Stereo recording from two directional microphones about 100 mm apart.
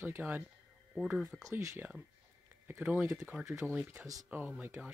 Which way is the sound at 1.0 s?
5° right (ahead or behind).